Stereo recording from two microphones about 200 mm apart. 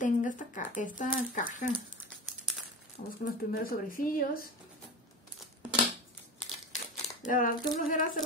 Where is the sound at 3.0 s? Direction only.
45° left (ahead or behind).